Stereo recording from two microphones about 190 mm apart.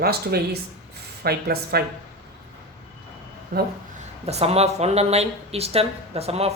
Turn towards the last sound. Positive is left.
turn(degrees=-35)  # may be behind; listen again after turning